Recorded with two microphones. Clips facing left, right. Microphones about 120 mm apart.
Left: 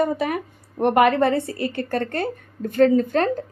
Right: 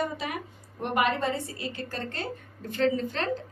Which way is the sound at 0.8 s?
60° left (ahead or behind).